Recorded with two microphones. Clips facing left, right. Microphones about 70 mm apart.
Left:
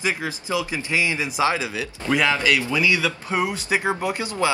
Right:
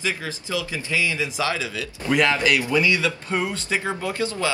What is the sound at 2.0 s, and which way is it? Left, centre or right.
Speech, centre.